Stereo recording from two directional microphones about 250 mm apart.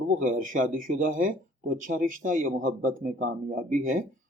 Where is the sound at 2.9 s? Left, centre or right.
Right.